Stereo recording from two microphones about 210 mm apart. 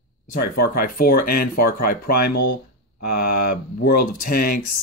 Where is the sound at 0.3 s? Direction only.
45° left (ahead or behind).